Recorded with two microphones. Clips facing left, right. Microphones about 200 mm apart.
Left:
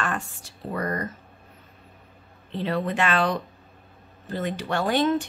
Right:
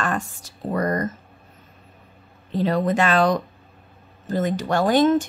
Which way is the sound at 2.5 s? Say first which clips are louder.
Right 6 dB; 40° right (ahead or behind).